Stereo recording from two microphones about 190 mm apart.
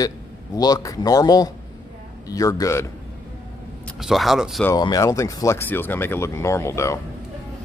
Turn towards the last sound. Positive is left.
turn(degrees=15)  # may be behind; listen again after turning